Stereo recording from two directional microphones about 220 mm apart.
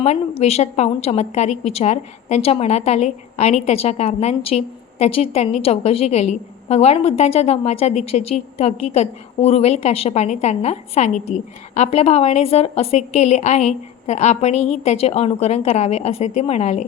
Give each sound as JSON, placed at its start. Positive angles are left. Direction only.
{"t": 0.0, "sound": "a woman's voice", "side_deg": 30}